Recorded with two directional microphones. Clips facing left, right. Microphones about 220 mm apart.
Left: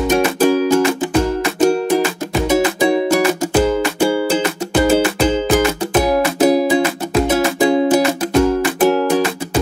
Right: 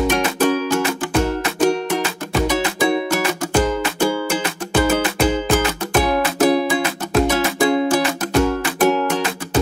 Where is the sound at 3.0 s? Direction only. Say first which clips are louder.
Left 6 dB; 10° left (ahead or behind).